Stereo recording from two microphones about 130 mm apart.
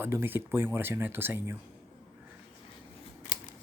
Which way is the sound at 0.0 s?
20° right (ahead or behind).